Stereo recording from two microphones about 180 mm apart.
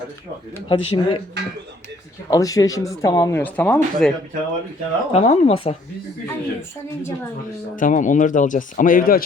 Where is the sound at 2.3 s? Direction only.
20° left (ahead or behind).